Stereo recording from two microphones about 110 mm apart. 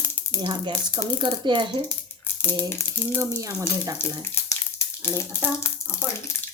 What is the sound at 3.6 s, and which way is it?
Speech, 30° right (ahead or behind).